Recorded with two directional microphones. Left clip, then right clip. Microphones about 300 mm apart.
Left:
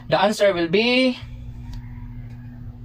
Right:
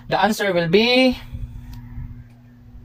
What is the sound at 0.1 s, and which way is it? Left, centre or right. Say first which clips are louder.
Speech: left 1 dB; right.